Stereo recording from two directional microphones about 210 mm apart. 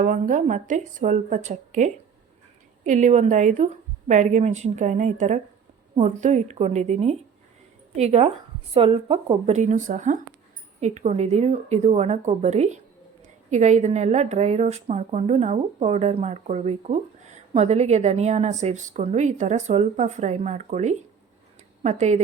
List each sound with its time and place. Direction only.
0.0 s a woman's voice: 40° right (ahead or behind)